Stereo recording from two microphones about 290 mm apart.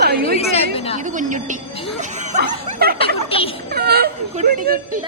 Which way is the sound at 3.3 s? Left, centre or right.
Centre.